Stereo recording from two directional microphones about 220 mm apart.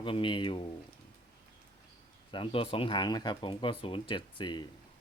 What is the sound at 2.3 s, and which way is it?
Speech, 25° left (ahead or behind).